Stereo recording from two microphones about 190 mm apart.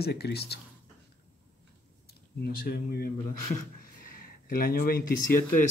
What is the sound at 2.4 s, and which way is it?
Speech, 55° left (ahead or behind).